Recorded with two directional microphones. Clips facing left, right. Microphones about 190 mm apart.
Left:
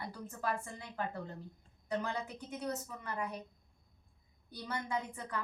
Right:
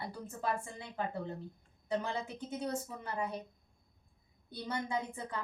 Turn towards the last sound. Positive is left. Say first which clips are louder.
# right 1 dB
turn(degrees=-25)  # may be behind; listen again after turning